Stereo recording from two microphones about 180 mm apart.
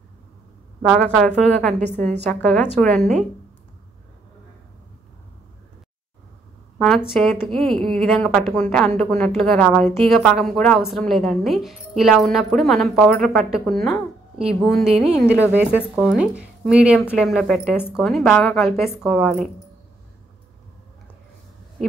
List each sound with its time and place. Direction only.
0.9 s a woman's voice: 5° left (ahead or behind)
7.1 s a woman's voice: centre (ahead or behind)